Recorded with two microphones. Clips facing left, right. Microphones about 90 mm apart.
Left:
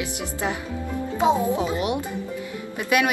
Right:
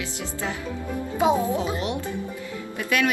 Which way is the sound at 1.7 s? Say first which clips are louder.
Left 2 dB; 20° left (ahead or behind).